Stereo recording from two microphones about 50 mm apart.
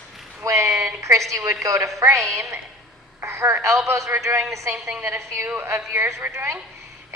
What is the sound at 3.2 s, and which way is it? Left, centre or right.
Telephone, right.